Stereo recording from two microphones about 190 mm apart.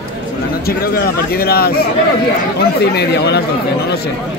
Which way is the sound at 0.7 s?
55° left (ahead or behind).